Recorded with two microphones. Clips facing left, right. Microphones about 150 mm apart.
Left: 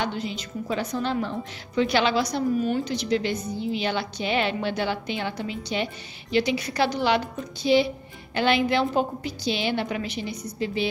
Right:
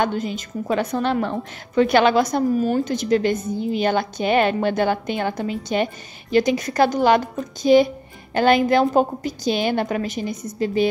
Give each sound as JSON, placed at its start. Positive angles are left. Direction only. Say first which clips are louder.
{"t": 0.0, "sound": "a woman's voice", "louder": "right 6 dB", "side_deg": -45}